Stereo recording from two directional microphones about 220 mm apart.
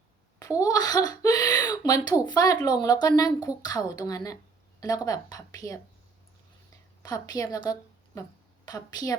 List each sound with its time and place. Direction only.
0.3 s speech: 15° left (ahead or behind)
7.0 s a woman's voice: 15° left (ahead or behind)